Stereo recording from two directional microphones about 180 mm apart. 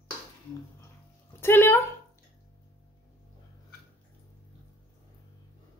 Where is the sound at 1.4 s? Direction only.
10° left (ahead or behind).